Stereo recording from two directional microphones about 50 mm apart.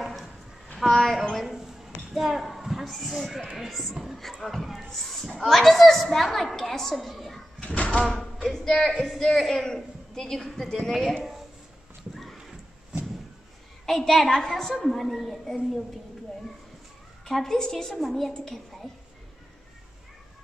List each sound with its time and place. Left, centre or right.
0.0 s a sound: centre
1.4 s a sound: centre
2.7 s a woman's voice: centre
7.6 s speech: left
8.0 s a woman's voice: centre
13.8 s a woman's voice: centre
17.2 s a man's voice: centre